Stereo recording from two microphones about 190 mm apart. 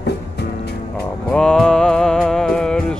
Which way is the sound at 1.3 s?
5° left (ahead or behind).